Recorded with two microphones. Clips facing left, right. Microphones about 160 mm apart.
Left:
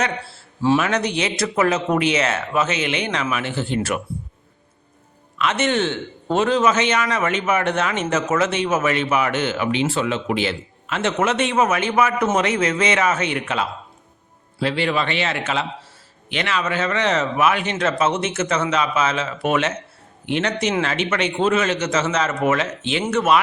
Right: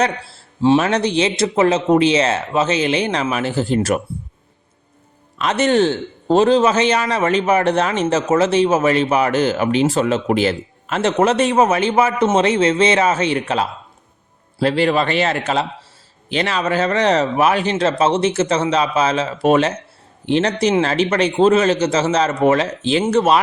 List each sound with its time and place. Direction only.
0.0 s a man's voice: 40° right (ahead or behind)
5.4 s speech: 35° right (ahead or behind)